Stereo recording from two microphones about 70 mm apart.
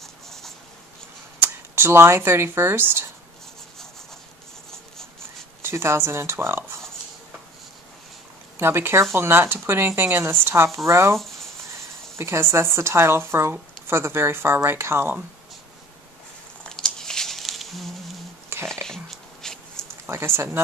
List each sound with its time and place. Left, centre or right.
0.0 s writing: centre
1.8 s a woman's voice: right
5.6 s a woman's voice: right
8.5 s a woman's voice: right
12.2 s a woman's voice: right
16.6 s a sound: centre
18.5 s whispering: right
18.9 s a sound: centre
20.1 s a woman's voice: right